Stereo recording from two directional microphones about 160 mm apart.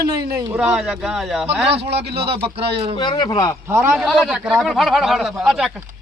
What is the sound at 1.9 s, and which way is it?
Speech, 90° right.